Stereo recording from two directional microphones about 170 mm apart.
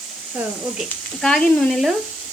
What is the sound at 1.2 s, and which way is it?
Speech, centre (ahead or behind).